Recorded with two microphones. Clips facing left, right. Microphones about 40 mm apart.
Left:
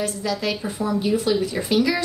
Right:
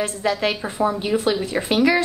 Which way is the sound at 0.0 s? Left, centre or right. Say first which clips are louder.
Right 3 dB; right.